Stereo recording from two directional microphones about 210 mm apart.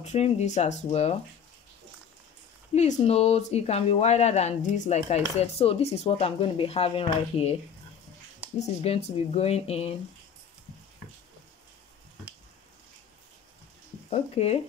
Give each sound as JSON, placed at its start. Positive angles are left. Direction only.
{"t": 0.0, "sound": "speech", "side_deg": 30}
{"t": 2.9, "sound": "speech", "side_deg": 30}
{"t": 8.5, "sound": "speech", "side_deg": 30}
{"t": 14.1, "sound": "speech", "side_deg": 30}